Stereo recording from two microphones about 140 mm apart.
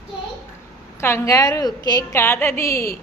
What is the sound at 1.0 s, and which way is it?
A woman's voice, 20° left (ahead or behind).